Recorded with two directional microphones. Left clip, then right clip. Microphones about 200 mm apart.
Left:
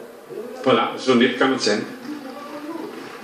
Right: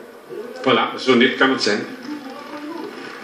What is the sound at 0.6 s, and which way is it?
Speech, 35° right (ahead or behind).